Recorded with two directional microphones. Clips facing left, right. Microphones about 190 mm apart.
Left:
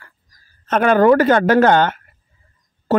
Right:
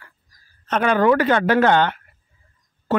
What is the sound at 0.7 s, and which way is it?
A woman's voice, 50° left (ahead or behind).